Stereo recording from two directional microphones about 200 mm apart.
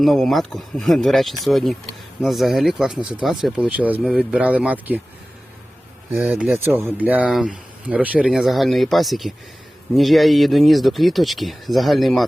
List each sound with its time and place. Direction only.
0.0 s speech: centre (ahead or behind)
3.0 s speech: 25° right (ahead or behind)
3.2 s speech: 5° right (ahead or behind)
6.1 s speech: 10° right (ahead or behind)